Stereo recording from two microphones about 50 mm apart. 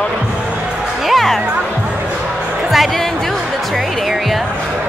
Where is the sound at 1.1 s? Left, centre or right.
Centre.